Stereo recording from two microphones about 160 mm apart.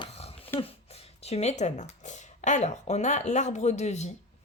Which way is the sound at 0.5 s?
40° left (ahead or behind).